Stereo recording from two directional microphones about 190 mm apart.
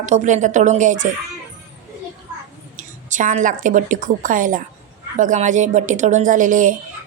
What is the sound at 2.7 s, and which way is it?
A woman's voice, 40° right (ahead or behind).